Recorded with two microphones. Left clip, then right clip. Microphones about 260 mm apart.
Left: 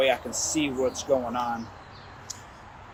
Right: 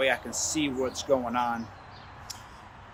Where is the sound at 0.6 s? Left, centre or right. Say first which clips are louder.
Left 2 dB; right.